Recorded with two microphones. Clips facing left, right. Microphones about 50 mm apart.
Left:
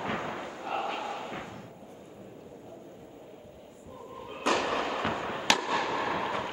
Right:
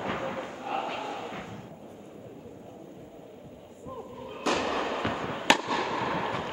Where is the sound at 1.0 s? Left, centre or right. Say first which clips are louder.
Right 1 dB; left.